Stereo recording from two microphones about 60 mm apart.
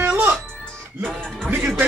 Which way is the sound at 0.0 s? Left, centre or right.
Right.